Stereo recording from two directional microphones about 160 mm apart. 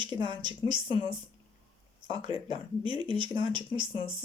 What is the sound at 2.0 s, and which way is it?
Speech, 30° right (ahead or behind).